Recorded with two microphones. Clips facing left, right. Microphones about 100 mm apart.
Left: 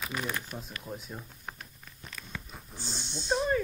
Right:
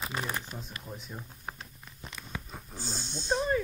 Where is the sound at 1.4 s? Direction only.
25° right (ahead or behind).